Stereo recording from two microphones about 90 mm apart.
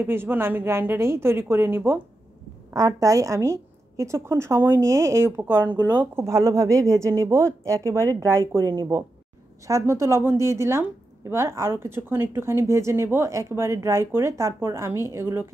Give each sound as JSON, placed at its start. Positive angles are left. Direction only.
{"t": 0.0, "sound": "speech", "side_deg": -25}
{"t": 2.7, "sound": "a woman's voice", "side_deg": -40}